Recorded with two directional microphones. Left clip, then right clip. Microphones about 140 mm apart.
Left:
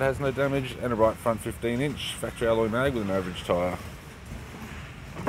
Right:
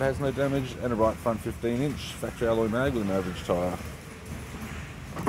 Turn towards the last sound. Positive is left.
turn(degrees=15)  # may be behind; listen again after turning